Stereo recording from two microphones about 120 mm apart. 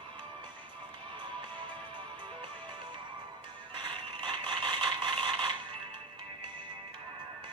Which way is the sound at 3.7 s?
40° right (ahead or behind).